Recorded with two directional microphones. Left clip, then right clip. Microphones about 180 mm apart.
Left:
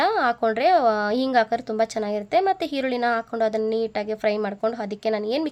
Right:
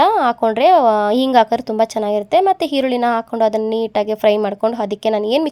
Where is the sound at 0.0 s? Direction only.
30° right (ahead or behind).